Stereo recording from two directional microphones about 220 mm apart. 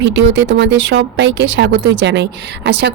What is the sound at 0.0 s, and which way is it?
Speech, 55° right (ahead or behind).